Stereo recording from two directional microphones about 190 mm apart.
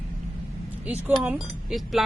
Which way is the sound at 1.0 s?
10° right (ahead or behind).